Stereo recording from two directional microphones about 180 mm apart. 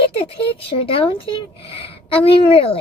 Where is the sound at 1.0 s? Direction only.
30° left (ahead or behind).